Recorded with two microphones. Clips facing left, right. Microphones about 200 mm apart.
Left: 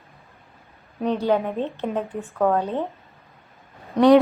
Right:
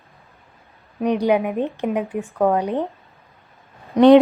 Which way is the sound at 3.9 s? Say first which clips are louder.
Right 4 dB; 20° right (ahead or behind).